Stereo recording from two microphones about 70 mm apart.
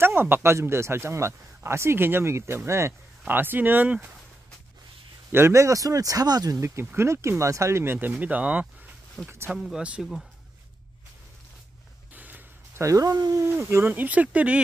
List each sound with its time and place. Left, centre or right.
0.0 s speech: right
3.3 s speech: right
5.3 s speech: right
6.6 s speech: right
7.8 s speech: right
8.2 s speech: right
9.2 s speech: centre
9.5 s speech: centre
12.1 s a sound: right
12.8 s speech: right
13.5 s speech: right